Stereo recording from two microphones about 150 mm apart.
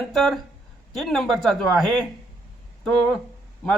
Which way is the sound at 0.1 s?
Centre (ahead or behind).